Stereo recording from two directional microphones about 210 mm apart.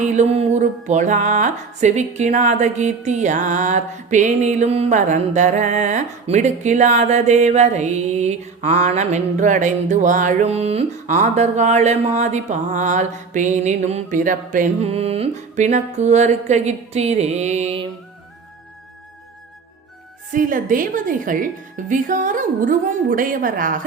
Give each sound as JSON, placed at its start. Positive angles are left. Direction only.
{"t": 0.0, "sound": "music", "side_deg": -35}
{"t": 20.3, "sound": "music", "side_deg": -40}